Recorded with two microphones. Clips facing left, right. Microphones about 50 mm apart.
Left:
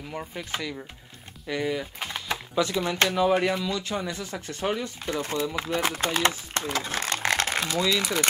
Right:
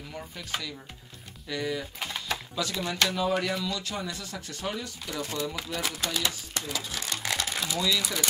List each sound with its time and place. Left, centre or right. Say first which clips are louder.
0.4 s speech: left 2 dB; left
1.5 s typing: left 3 dB; left
2.8 s speech: left 2 dB; left